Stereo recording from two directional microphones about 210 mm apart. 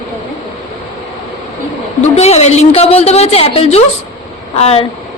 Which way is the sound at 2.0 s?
30° left (ahead or behind).